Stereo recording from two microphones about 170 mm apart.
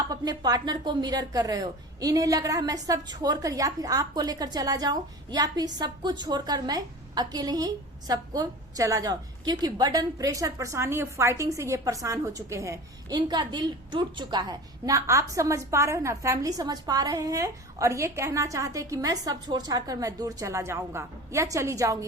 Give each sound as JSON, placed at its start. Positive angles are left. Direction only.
{"t": 0.1, "sound": "a woman's voice", "side_deg": -20}